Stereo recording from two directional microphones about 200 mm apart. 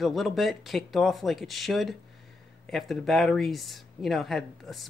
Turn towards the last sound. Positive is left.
turn(degrees=0)  # may be behind; listen again after turning